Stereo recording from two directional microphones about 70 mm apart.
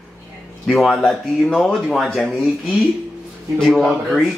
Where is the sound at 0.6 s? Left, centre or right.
Centre.